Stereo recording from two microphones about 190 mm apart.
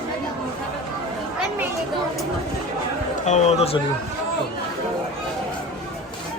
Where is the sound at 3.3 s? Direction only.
35° left (ahead or behind).